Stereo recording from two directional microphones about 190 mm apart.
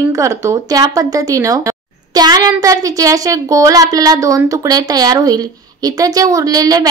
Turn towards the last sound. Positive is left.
turn(degrees=-20)  # may be behind; listen again after turning